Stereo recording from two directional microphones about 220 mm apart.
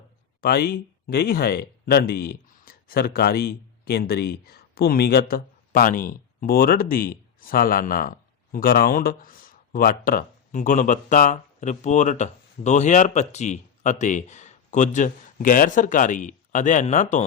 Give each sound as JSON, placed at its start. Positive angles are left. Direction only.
{"t": 0.4, "sound": "speech", "side_deg": 45}